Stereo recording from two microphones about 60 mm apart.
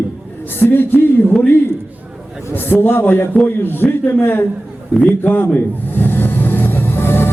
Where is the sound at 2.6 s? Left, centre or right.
Left.